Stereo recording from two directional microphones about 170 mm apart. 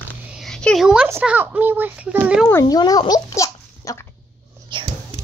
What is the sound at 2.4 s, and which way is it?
A child's voice, 15° left (ahead or behind).